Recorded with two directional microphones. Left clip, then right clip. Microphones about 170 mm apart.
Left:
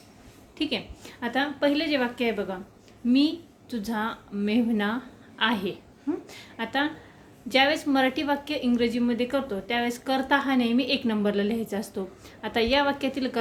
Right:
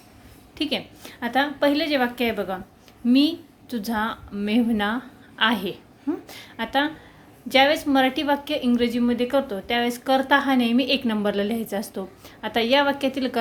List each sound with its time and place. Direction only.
0.6 s a woman's voice: 35° right (ahead or behind)